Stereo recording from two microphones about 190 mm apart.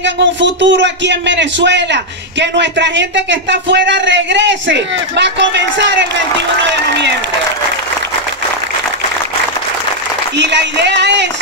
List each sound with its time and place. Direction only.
0.0 s a man's voice: 70° right (ahead or behind)
10.3 s a man's voice: 70° right (ahead or behind)